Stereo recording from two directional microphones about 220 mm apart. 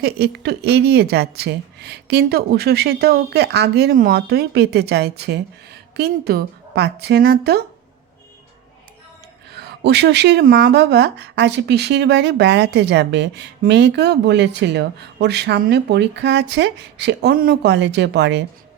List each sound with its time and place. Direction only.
0.0 s speech: 45° right (ahead or behind)
9.6 s speech: 50° right (ahead or behind)